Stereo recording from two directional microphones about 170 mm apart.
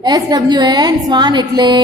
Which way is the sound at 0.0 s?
25° right (ahead or behind).